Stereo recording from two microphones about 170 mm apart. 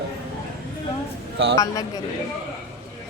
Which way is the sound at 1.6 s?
20° left (ahead or behind).